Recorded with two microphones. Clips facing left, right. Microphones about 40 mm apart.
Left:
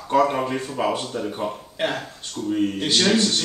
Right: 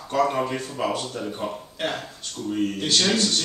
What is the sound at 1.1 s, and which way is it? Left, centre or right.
Speech, centre.